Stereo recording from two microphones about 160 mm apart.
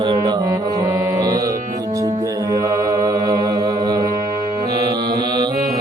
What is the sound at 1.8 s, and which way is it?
Mantra, 20° right (ahead or behind).